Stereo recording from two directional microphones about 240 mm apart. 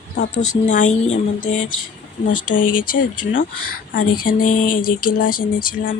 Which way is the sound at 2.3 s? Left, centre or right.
Left.